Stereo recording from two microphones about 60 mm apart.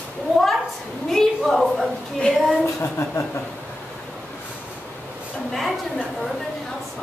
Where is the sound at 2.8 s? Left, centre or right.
Left.